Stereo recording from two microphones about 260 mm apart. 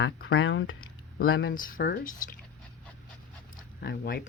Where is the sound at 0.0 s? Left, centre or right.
Left.